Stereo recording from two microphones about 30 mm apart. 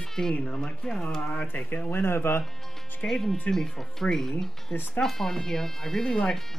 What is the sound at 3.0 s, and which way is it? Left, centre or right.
Speech, centre.